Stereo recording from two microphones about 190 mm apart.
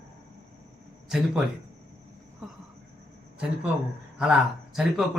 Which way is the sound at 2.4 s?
Centre (ahead or behind).